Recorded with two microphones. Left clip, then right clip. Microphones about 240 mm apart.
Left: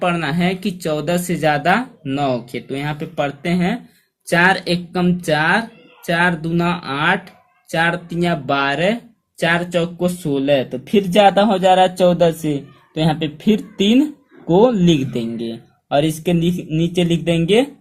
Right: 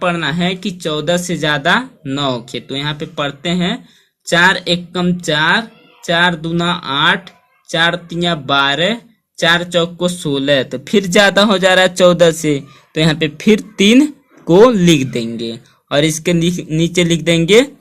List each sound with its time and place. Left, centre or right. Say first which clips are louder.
0.0 s speech: right 2 dB; centre; by 13.6 s right
14.7 s speech: right 4 dB; right